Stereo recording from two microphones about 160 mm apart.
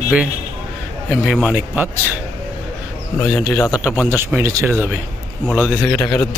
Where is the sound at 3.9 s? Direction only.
20° left (ahead or behind).